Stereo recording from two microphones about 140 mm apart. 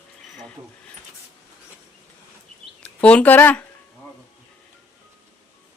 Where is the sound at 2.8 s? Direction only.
10° left (ahead or behind).